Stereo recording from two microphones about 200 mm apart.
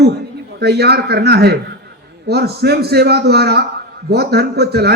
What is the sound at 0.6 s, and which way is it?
A man's voice, 55° right (ahead or behind).